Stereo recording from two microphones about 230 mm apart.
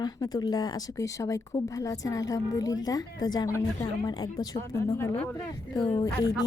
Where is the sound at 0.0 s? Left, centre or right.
Centre.